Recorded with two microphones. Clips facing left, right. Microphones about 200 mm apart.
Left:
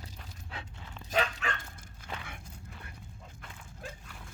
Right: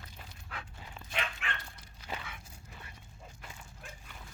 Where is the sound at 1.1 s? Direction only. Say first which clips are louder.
Left 8 dB; 40° left (ahead or behind).